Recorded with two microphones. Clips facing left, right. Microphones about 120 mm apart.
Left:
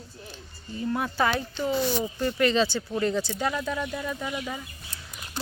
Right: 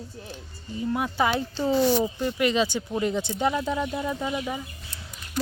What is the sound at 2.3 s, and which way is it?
Speech, 10° right (ahead or behind).